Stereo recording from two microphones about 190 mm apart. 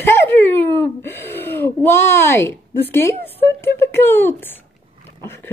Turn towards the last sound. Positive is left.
turn(degrees=10)  # may be behind; listen again after turning